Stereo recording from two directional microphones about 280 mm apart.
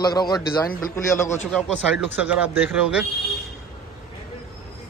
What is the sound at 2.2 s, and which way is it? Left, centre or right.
Speech, centre.